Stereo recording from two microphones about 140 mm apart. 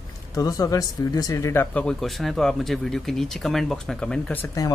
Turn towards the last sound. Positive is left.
turn(degrees=10)  # may be behind; listen again after turning